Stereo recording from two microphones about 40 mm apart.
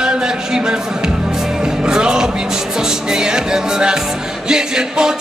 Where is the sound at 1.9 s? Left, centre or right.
Centre.